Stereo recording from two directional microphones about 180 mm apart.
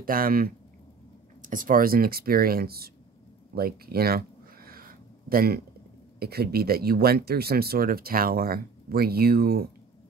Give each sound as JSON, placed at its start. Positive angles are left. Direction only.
{"t": 0.0, "sound": "speech", "side_deg": -50}
{"t": 3.5, "sound": "a sound", "side_deg": -60}
{"t": 6.1, "sound": "speech", "side_deg": -60}